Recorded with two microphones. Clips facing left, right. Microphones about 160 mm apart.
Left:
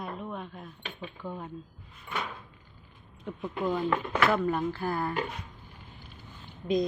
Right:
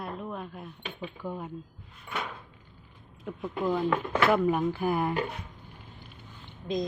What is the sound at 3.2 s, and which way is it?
Speech, centre (ahead or behind).